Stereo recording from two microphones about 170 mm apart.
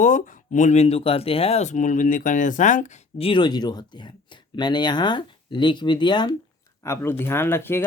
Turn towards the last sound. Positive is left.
turn(degrees=15)  # may be behind; listen again after turning